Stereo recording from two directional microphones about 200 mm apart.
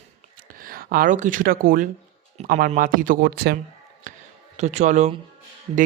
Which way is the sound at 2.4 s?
35° right (ahead or behind).